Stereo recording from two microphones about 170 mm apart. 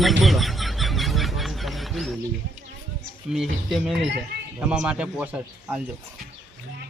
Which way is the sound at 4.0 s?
90° right.